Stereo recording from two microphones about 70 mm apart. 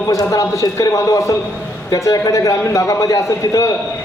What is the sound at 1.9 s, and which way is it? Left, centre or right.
A man's voice, left.